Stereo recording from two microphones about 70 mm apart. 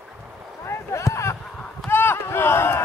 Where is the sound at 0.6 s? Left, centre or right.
Left.